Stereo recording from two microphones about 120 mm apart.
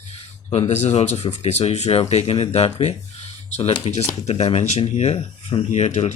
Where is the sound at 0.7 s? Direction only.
65° left (ahead or behind).